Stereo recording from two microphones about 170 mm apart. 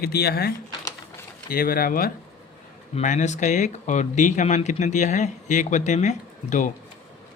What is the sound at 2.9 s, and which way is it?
Speech, 45° left (ahead or behind).